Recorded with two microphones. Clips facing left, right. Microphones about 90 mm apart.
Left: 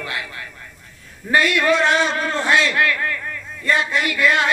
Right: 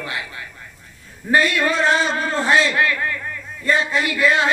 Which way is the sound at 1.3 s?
30° right (ahead or behind).